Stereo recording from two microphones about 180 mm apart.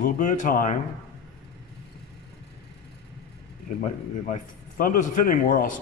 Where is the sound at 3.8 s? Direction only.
45° left (ahead or behind).